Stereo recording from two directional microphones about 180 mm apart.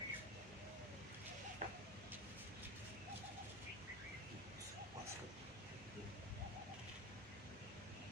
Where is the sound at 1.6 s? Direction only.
45° right (ahead or behind).